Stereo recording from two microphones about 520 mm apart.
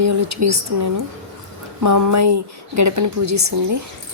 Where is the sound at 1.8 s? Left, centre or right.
Right.